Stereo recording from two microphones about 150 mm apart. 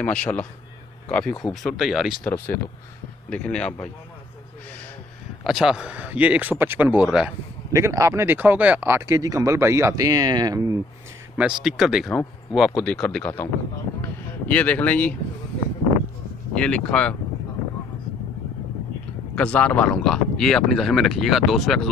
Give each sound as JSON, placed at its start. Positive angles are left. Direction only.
{"t": 0.0, "sound": "speech", "side_deg": 10}
{"t": 3.3, "sound": "speech", "side_deg": 10}
{"t": 5.4, "sound": "speech", "side_deg": -5}
{"t": 7.7, "sound": "speech", "side_deg": -20}
{"t": 11.3, "sound": "speech", "side_deg": -5}
{"t": 14.5, "sound": "speech", "side_deg": 10}
{"t": 16.5, "sound": "speech", "side_deg": 5}
{"t": 19.3, "sound": "speech", "side_deg": 10}